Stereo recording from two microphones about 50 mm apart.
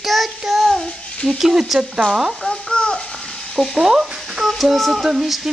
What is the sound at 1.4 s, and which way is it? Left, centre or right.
Speech, centre.